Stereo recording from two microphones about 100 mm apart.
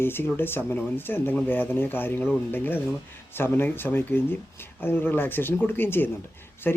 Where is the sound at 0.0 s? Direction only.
20° left (ahead or behind).